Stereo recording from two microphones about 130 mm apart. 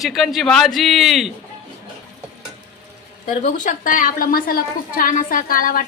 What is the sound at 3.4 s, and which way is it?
A woman's voice, 75° left (ahead or behind).